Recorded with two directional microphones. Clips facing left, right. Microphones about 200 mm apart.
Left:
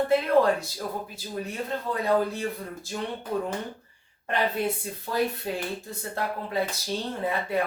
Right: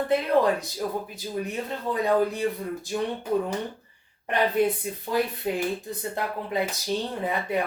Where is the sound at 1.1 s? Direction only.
15° right (ahead or behind).